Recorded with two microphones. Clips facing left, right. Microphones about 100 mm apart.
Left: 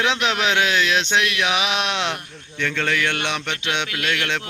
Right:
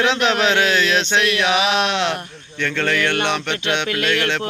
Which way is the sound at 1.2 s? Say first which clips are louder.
Right 4 dB; 40° right (ahead or behind).